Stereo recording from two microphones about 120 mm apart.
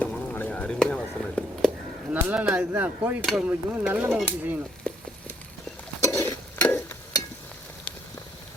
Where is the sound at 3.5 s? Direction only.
15° right (ahead or behind).